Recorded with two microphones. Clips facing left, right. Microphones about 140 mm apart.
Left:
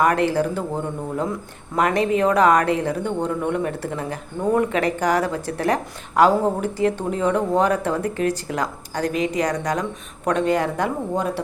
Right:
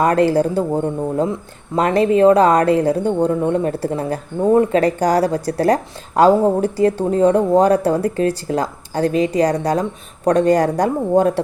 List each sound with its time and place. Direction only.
0.0 s a woman's voice: 30° right (ahead or behind)
1.7 s a woman's voice: 30° right (ahead or behind); by 11.3 s 45° right (ahead or behind)